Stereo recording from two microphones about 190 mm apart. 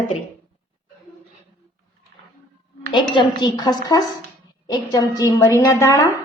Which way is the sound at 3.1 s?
25° left (ahead or behind).